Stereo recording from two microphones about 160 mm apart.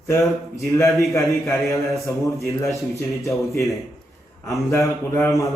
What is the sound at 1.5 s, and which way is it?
A man's voice, 20° left (ahead or behind).